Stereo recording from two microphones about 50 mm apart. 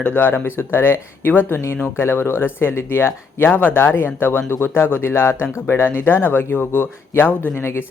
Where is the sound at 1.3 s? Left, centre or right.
Left.